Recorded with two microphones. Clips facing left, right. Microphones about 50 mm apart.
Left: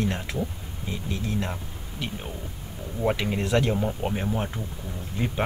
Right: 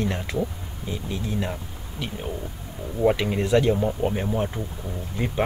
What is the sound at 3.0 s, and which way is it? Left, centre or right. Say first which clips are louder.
Speech: right 4 dB; centre.